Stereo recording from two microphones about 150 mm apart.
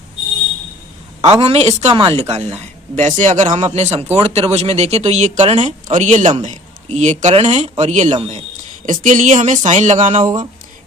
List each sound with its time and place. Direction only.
1.4 s speech: 40° right (ahead or behind)